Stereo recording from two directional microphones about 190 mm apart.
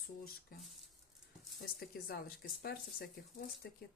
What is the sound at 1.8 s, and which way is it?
Speech, 55° left (ahead or behind).